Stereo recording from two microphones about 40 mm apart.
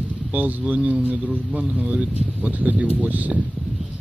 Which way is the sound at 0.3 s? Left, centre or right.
Right.